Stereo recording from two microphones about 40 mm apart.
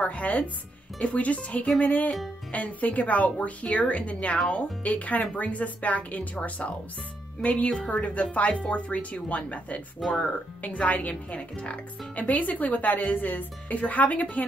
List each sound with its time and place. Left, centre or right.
0.0 s speech: left
10.0 s speech: centre
10.6 s a woman's voice: left